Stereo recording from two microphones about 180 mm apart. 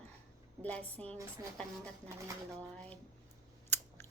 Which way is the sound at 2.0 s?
15° right (ahead or behind).